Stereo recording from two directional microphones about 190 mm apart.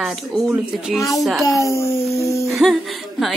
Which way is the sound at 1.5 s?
15° left (ahead or behind).